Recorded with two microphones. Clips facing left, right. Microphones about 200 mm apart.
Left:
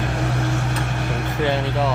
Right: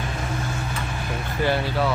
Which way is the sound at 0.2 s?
75° left (ahead or behind).